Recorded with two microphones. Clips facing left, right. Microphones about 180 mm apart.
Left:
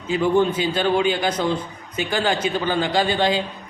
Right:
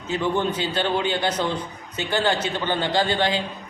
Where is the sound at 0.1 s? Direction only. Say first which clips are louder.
Left 5 dB; 10° left (ahead or behind).